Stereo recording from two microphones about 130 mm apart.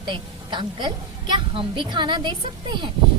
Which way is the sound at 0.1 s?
35° right (ahead or behind).